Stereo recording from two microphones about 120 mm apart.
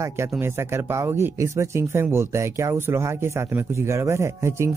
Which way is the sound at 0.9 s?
20° right (ahead or behind).